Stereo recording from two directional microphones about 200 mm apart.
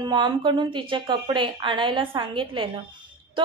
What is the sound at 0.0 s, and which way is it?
A woman's voice, 20° right (ahead or behind).